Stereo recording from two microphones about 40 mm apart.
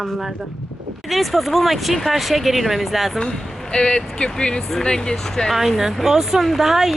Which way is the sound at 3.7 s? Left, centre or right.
Left.